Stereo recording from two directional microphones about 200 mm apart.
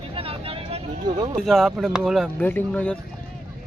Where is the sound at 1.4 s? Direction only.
Centre (ahead or behind).